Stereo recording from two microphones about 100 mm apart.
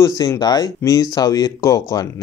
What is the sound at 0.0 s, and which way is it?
Speech, 35° left (ahead or behind).